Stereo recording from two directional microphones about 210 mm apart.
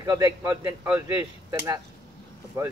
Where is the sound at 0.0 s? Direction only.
15° right (ahead or behind).